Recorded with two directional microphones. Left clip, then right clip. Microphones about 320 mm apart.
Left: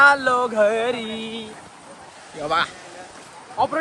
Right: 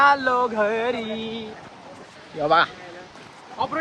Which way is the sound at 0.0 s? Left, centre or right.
Centre.